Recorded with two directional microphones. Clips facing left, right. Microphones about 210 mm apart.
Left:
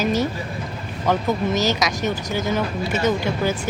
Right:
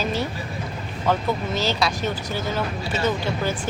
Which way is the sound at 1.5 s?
45° left (ahead or behind).